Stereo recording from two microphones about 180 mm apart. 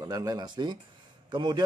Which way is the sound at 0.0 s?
20° right (ahead or behind).